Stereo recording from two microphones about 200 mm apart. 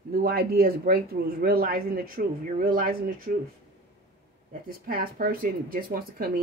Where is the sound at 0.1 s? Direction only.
50° right (ahead or behind).